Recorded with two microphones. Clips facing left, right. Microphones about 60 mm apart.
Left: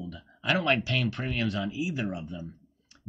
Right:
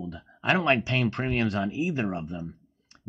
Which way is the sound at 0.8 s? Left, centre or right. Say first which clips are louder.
Right 3 dB; right.